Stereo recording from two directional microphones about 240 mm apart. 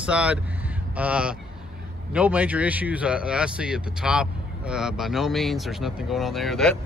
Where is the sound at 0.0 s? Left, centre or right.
Centre.